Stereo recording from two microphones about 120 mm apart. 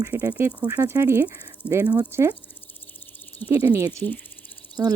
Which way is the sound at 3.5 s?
25° right (ahead or behind).